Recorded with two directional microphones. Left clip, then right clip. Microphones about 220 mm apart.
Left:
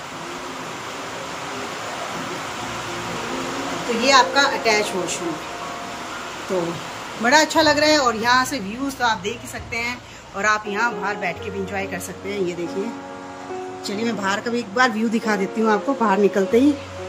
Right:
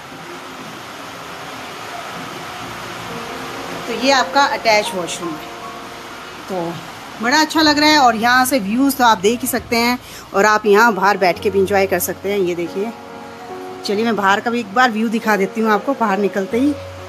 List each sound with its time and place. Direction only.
4.0 s speech: 5° right (ahead or behind)
7.2 s speech: centre (ahead or behind); by 12.5 s 20° right (ahead or behind)
13.8 s speech: 10° right (ahead or behind)